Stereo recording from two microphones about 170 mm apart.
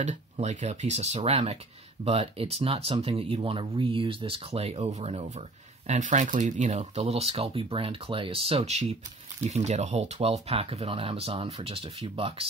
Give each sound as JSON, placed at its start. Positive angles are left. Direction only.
{"t": 0.0, "sound": "speech", "side_deg": -45}